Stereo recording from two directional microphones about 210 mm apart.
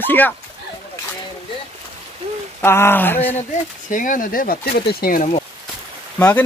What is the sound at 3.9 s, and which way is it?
Speech, 40° left (ahead or behind).